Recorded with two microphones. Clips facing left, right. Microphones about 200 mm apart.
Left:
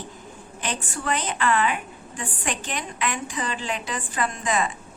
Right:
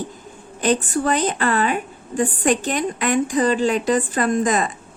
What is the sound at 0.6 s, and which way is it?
A woman's voice, 40° right (ahead or behind).